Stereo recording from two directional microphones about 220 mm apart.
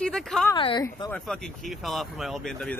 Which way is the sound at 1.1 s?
Centre (ahead or behind).